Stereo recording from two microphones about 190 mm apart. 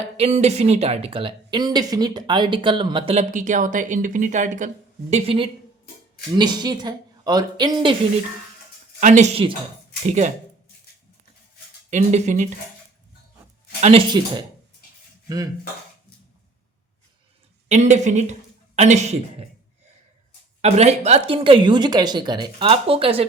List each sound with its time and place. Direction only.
0.2 s speech: 35° right (ahead or behind)
3.2 s speech: 40° right (ahead or behind)
5.1 s speech: 30° right (ahead or behind)
9.0 s speech: 40° right (ahead or behind)
11.9 s speech: 40° right (ahead or behind)
13.8 s speech: 30° right (ahead or behind)
17.7 s speech: 35° right (ahead or behind)
20.6 s speech: 35° right (ahead or behind)